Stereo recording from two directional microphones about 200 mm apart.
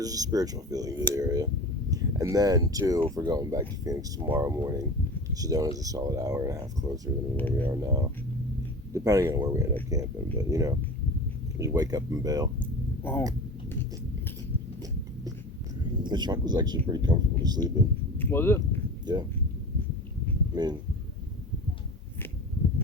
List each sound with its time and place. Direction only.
0.0 s speech: 15° right (ahead or behind)
7.3 s speech: 10° left (ahead or behind)
7.7 s speech: 15° right (ahead or behind)
13.0 s speech: 10° left (ahead or behind)
15.8 s speech: 20° right (ahead or behind)
18.2 s a sound: 10° left (ahead or behind)
19.1 s speech: 20° right (ahead or behind)
20.5 s speech: 20° right (ahead or behind)